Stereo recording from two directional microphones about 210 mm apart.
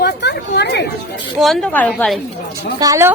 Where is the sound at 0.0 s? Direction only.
55° left (ahead or behind).